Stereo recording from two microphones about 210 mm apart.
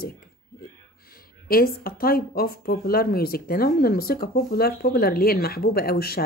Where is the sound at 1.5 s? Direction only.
45° left (ahead or behind).